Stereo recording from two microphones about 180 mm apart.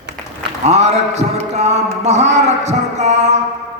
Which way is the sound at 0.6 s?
40° right (ahead or behind).